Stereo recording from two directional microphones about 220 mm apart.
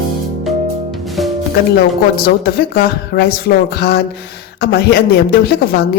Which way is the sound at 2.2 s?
45° left (ahead or behind).